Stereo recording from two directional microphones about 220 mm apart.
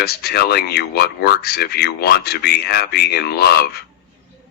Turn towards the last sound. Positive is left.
turn(degrees=45)  # may be behind; listen again after turning